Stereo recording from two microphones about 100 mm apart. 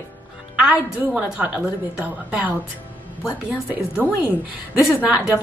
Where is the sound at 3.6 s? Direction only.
15° right (ahead or behind).